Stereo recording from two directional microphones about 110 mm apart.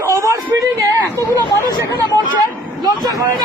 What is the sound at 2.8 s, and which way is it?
Speech, 35° right (ahead or behind).